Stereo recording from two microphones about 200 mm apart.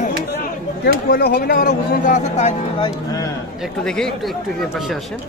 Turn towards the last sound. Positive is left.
turn(degrees=5)  # may be behind; listen again after turning